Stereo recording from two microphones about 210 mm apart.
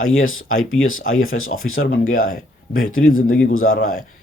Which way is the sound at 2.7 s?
75° left (ahead or behind).